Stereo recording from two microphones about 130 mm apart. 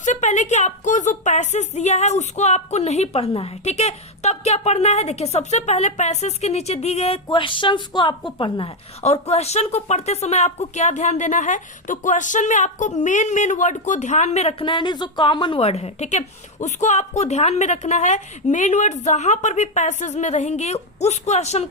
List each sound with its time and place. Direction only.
0.0 s a woman's voice: 70° left (ahead or behind)
7.3 s a woman's voice: 40° left (ahead or behind)
9.0 s a woman's voice: 55° left (ahead or behind)
14.6 s a woman's voice: 40° left (ahead or behind)
15.6 s a woman's voice: 55° left (ahead or behind)